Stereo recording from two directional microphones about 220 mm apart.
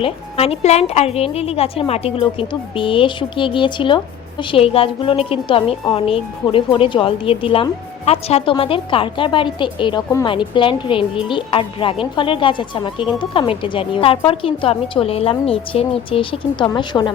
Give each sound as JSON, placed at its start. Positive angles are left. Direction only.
{"t": 0.0, "sound": "a woman's voice", "side_deg": 25}